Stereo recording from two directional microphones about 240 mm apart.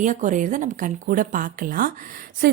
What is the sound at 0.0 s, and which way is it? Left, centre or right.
Speech, right.